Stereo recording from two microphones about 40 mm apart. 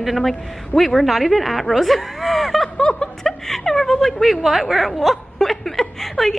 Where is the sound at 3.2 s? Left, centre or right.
Centre.